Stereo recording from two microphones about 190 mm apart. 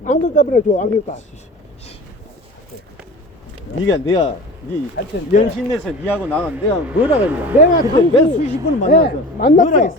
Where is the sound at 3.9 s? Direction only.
20° left (ahead or behind).